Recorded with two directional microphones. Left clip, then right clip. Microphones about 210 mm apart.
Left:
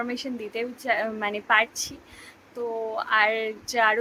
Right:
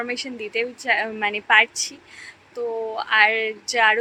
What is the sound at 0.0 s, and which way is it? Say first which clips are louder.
A woman's voice: right 3 dB; 20° left (ahead or behind).